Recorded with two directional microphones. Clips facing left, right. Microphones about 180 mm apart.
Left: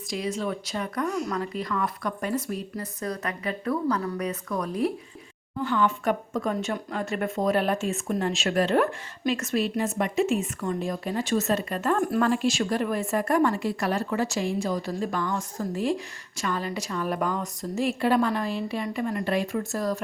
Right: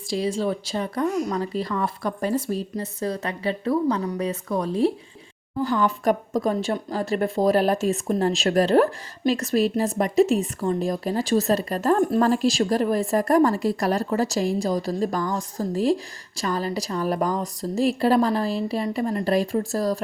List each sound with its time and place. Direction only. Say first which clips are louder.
0.1 s a woman's voice: right 5 dB; 30° right (ahead or behind)